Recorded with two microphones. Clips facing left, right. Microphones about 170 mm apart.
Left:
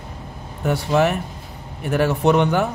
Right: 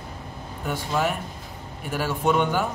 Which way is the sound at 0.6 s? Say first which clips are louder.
Left 7 dB; 70° left (ahead or behind).